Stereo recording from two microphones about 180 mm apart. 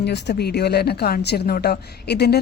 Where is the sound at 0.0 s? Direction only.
70° left (ahead or behind).